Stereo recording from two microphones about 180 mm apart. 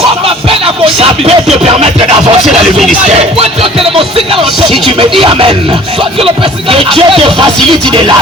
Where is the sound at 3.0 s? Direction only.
35° right (ahead or behind).